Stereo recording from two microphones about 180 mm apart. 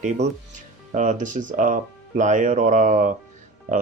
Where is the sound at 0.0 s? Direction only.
40° right (ahead or behind).